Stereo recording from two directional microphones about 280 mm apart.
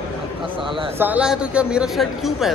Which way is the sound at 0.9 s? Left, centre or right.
Centre.